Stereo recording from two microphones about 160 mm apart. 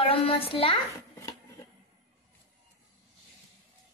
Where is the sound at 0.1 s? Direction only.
35° left (ahead or behind).